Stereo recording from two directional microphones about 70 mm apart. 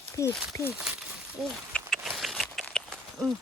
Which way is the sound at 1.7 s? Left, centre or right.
Centre.